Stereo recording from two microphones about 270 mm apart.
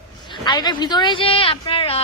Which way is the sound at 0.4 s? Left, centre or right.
Centre.